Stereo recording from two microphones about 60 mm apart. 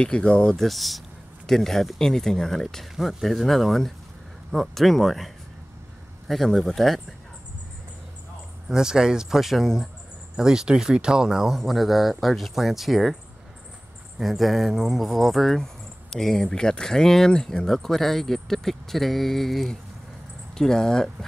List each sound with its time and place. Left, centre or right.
0.0 s speech: centre
0.6 s speech: centre
8.6 s speech: centre
11.5 s speech: centre